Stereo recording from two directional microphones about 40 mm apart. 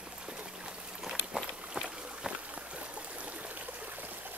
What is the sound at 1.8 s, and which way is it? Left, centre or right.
Stream, right.